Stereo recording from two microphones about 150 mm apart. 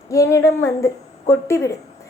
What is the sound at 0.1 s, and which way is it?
A woman's voice, 20° left (ahead or behind).